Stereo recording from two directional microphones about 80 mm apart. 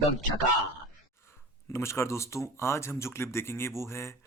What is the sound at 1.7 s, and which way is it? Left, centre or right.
Speech, left.